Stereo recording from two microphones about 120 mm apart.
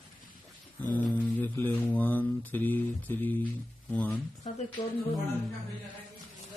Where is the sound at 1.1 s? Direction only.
15° left (ahead or behind).